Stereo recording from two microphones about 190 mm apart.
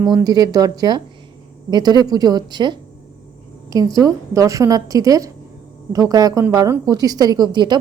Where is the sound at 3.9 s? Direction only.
15° right (ahead or behind).